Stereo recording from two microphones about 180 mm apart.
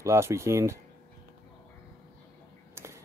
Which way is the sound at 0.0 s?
15° right (ahead or behind).